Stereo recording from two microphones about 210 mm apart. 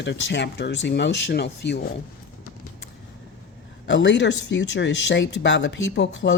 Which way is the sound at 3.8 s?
60° left (ahead or behind).